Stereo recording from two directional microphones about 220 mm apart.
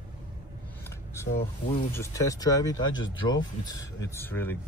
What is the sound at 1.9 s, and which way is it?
Speech, 15° left (ahead or behind).